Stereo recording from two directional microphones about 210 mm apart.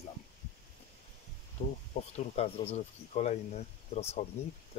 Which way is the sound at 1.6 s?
35° left (ahead or behind).